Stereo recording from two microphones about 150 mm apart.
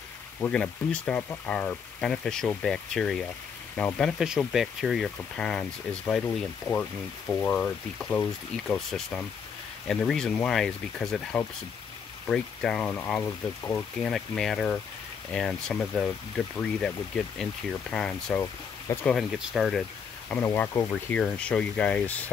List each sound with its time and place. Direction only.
0.4 s speech: 5° left (ahead or behind)
4.2 s speech: 5° right (ahead or behind)
20.2 s speech: 10° left (ahead or behind)